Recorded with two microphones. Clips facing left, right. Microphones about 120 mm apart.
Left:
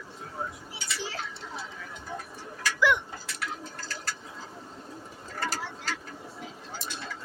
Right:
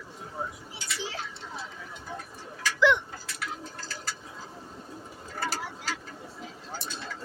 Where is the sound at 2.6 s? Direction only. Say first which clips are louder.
Right 2 dB; 10° left (ahead or behind).